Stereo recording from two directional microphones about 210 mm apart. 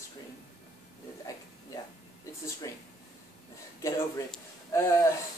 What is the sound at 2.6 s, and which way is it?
Speech, 15° left (ahead or behind).